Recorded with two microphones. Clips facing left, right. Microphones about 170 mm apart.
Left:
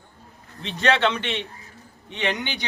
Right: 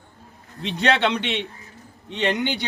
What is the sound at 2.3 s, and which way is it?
Speech, 65° right (ahead or behind).